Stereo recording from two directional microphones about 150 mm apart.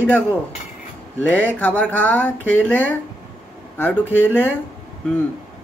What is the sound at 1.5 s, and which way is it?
Speech, 10° left (ahead or behind).